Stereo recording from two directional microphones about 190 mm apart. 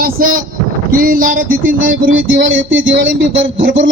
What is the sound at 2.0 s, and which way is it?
Music, 90° right.